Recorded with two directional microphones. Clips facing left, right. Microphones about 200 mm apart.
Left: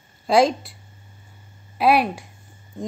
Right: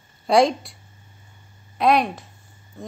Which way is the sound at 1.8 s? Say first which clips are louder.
Left 1 dB; 5° left (ahead or behind).